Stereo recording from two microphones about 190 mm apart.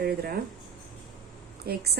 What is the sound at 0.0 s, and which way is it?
Speech, 55° right (ahead or behind).